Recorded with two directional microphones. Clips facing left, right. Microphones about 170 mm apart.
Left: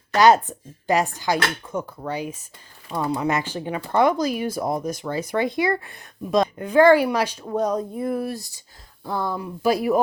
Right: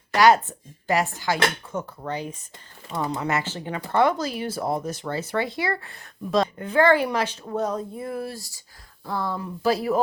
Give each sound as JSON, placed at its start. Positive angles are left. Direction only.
{"t": 0.2, "sound": "speech", "side_deg": 20}